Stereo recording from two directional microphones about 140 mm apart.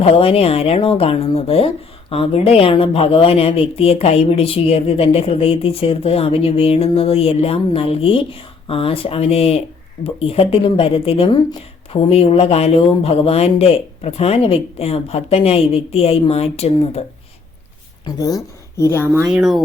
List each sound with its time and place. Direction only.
0.0 s speech: 45° left (ahead or behind)
18.0 s a woman's voice: 25° left (ahead or behind)
19.0 s speech: 15° right (ahead or behind)
19.3 s speech: centre (ahead or behind)